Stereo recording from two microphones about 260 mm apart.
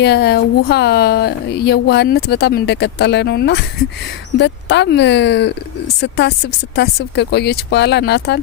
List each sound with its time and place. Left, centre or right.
0.0 s speech: left